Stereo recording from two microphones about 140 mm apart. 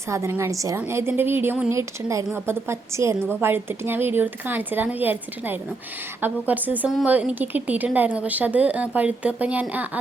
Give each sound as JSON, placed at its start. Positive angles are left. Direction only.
{"t": 0.1, "sound": "a woman's voice", "side_deg": -20}